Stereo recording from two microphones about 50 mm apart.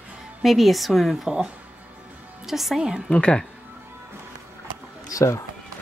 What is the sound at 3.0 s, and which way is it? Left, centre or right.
Speech, centre.